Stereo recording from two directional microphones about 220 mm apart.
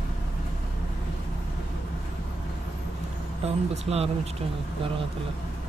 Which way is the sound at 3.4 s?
30° right (ahead or behind).